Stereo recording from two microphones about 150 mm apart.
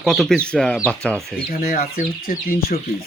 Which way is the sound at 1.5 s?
70° left (ahead or behind).